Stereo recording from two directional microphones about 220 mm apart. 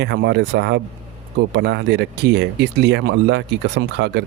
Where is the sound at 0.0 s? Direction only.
50° right (ahead or behind).